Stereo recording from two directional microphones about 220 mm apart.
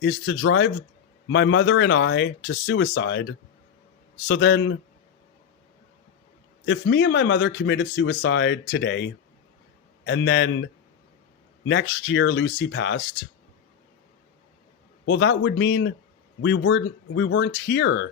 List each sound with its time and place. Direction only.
0.0 s speech: 55° left (ahead or behind)
6.7 s a man's voice: 55° left (ahead or behind)
15.0 s speech: 55° left (ahead or behind)